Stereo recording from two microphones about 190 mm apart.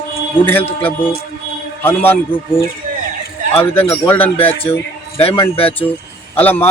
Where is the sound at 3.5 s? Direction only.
30° left (ahead or behind).